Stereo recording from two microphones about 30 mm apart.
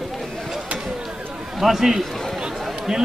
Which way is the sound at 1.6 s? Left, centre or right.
Centre.